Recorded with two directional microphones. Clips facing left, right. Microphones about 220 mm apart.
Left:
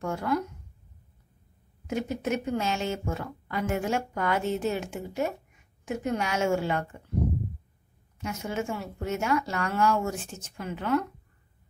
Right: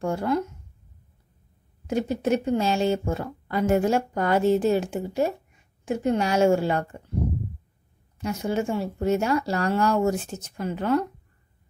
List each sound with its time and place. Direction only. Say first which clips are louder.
0.0 s speech: right 4 dB; 30° right (ahead or behind)
1.9 s speech: right 5 dB; 35° right (ahead or behind)
8.2 s speech: right 6 dB; 35° right (ahead or behind)